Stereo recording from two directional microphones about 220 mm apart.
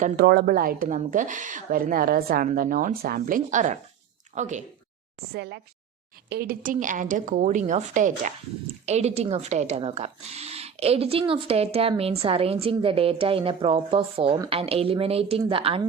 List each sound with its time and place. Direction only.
0.0 s a woman's voice: 45° right (ahead or behind)
5.3 s a woman's voice: 50° right (ahead or behind); by 15.9 s 25° right (ahead or behind)